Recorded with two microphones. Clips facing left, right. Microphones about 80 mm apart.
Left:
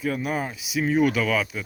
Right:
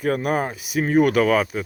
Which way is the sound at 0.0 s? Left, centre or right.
Right.